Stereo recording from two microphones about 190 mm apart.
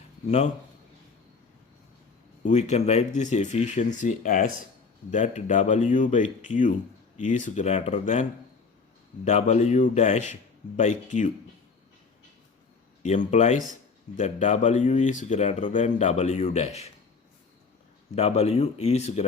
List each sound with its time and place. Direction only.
2.4 s speech: 40° left (ahead or behind)
13.0 s speech: 40° left (ahead or behind)
18.1 s speech: 35° left (ahead or behind)